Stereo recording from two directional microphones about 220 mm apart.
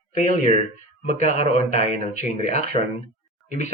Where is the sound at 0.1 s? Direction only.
35° left (ahead or behind).